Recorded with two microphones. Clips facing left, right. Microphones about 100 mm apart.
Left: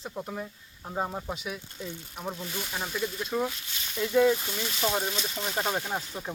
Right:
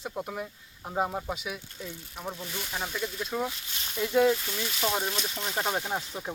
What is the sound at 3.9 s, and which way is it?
Speech, 15° right (ahead or behind).